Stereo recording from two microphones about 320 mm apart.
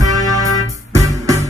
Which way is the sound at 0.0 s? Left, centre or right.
Centre.